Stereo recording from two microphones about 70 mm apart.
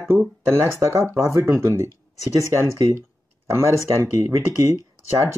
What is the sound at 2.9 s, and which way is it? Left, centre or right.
Speech, right.